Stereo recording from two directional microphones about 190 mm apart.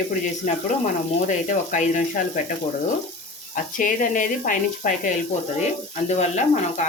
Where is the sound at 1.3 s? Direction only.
40° left (ahead or behind).